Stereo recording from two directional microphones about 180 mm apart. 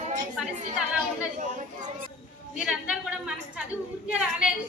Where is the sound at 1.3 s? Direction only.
45° right (ahead or behind).